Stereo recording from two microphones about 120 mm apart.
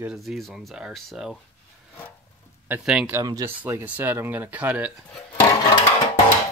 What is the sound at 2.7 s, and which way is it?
Speech, 15° right (ahead or behind).